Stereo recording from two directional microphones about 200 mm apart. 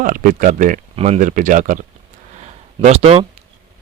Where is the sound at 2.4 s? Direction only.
35° right (ahead or behind).